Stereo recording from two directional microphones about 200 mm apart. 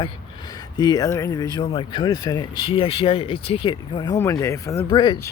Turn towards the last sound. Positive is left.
turn(degrees=20)  # may be behind; listen again after turning